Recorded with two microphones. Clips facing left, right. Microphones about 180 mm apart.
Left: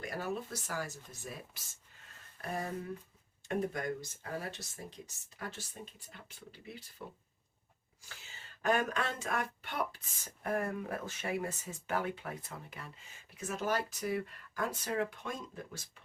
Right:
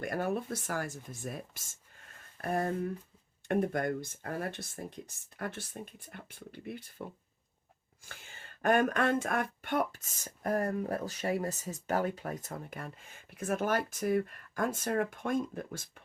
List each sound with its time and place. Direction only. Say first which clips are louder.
0.0 s speech: right 5 dB; 55° right (ahead or behind)
8.0 s speech: right 3 dB; 55° right (ahead or behind)